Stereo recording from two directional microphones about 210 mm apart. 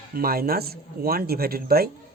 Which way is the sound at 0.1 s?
45° right (ahead or behind).